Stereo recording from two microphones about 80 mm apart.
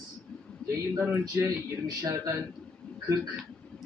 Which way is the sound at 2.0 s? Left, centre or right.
Right.